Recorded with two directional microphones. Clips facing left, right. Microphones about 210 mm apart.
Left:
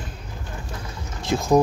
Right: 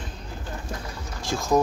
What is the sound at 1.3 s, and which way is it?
Speech, 20° left (ahead or behind).